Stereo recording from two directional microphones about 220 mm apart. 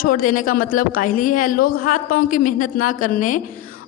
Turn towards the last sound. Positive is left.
turn(degrees=40)  # may be behind; listen again after turning